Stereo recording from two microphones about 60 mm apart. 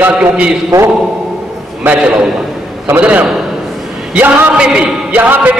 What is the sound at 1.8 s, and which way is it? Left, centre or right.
Speech, right.